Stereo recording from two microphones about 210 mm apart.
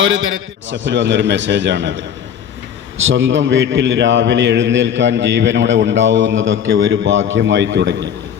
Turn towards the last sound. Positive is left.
turn(degrees=-60)  # may be behind; listen again after turning